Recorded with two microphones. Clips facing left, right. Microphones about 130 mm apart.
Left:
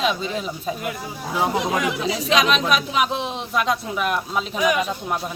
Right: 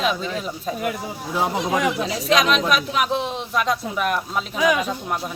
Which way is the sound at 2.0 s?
Centre (ahead or behind).